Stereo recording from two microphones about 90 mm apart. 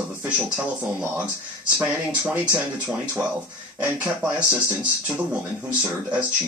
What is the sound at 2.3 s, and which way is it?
Speech, 20° right (ahead or behind).